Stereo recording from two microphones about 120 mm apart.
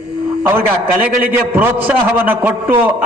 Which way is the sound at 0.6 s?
15° right (ahead or behind).